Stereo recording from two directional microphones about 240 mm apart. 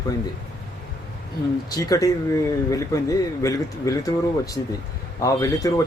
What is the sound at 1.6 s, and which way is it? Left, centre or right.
Speech, centre.